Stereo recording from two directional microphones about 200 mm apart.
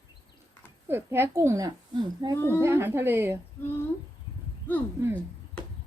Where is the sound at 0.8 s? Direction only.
10° right (ahead or behind).